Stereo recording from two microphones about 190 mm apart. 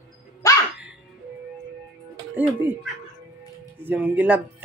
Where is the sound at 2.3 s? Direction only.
10° right (ahead or behind).